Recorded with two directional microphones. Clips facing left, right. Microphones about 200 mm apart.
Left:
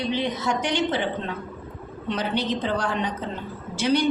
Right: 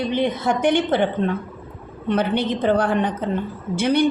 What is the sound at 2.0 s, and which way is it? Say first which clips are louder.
A woman's voice: right 5 dB; 55° right (ahead or behind).